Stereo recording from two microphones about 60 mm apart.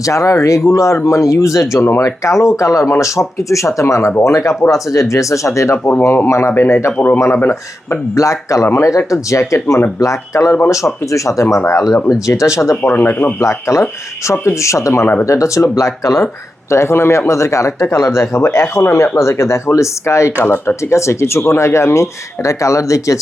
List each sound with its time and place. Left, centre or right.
0.0 s speech: left
5.9 s speech: left
8.1 s speech: left
12.7 s speech: left
13.4 s speech: left